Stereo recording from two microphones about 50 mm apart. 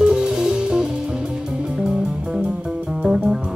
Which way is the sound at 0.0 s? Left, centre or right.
Centre.